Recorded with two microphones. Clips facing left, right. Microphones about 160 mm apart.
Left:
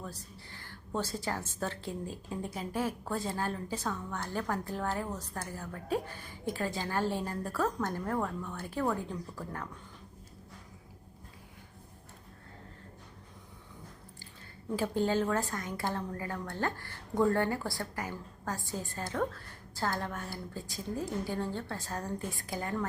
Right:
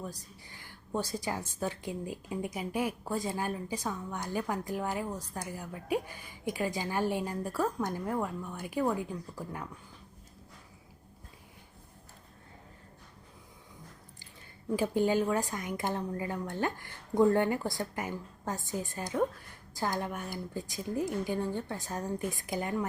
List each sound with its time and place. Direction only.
0.0 s a woman's voice: 15° right (ahead or behind)
14.8 s a woman's voice: 15° right (ahead or behind)